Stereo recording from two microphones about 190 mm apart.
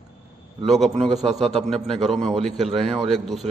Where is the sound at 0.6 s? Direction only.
Centre (ahead or behind).